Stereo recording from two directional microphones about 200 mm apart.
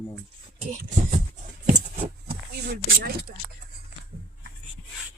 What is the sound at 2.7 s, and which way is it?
Speech, 50° right (ahead or behind).